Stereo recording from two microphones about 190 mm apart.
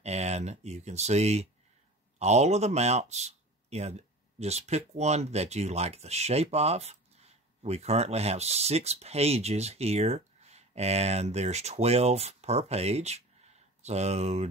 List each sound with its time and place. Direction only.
0.0 s a man's voice: 35° right (ahead or behind)